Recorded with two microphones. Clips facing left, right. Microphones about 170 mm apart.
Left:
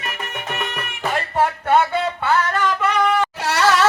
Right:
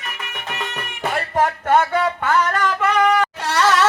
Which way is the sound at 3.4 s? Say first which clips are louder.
Left 1 dB; 5° left (ahead or behind).